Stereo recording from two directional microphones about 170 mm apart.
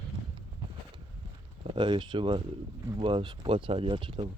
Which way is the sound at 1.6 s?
30° right (ahead or behind).